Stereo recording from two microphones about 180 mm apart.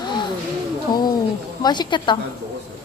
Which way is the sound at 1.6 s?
25° left (ahead or behind).